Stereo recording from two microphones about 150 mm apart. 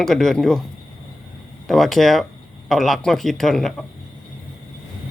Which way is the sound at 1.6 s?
Centre (ahead or behind).